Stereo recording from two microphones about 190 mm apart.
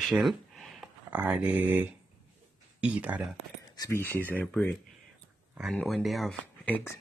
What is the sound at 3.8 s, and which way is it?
Speech, 15° left (ahead or behind).